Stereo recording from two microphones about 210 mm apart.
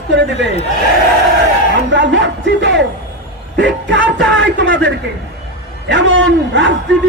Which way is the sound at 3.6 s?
60° right (ahead or behind).